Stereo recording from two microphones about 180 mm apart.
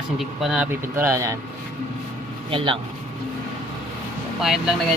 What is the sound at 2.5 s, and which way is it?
Speech, 30° right (ahead or behind).